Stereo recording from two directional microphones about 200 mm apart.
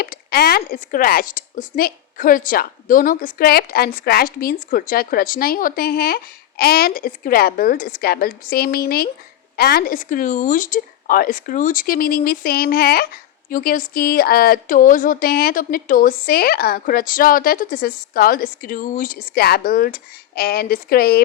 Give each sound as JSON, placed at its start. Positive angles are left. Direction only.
{"t": 0.0, "sound": "speech", "side_deg": 50}